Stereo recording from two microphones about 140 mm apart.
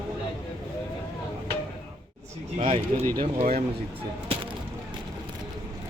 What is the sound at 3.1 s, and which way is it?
Speech, 90° right.